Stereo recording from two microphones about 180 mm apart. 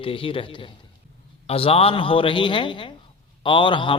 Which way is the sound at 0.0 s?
30° left (ahead or behind).